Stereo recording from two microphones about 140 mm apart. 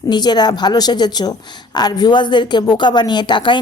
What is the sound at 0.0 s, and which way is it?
A woman's voice, 30° left (ahead or behind).